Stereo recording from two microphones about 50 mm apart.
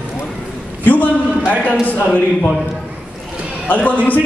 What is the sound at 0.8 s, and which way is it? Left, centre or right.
Speech, left.